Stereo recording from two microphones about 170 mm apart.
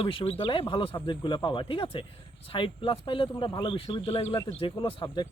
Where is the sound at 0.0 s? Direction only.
30° left (ahead or behind).